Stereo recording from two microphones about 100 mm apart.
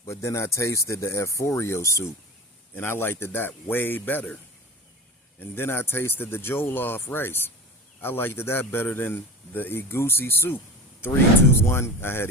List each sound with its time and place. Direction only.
0.1 s speech: 30° left (ahead or behind)
5.4 s speech: 20° left (ahead or behind)